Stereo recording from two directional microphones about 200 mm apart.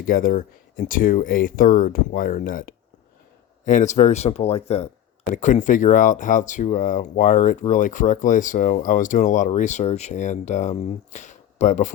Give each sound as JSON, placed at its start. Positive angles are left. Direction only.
{"t": 0.0, "sound": "speech", "side_deg": 45}